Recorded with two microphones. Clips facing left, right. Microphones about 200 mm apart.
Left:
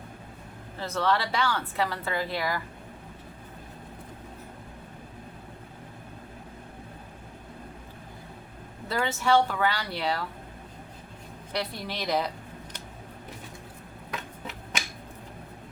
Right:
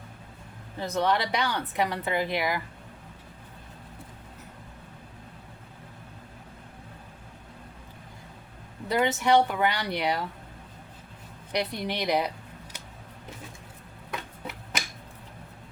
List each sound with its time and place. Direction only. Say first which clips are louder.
0.8 s a woman's voice: right 1 dB; 15° right (ahead or behind)
8.9 s a woman's voice: right 2 dB; 20° right (ahead or behind)
11.5 s a woman's voice: right 3 dB; 15° right (ahead or behind)